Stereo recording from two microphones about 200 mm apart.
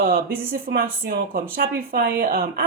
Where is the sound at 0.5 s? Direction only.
45° right (ahead or behind).